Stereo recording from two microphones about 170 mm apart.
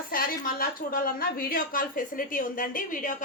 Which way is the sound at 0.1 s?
55° left (ahead or behind).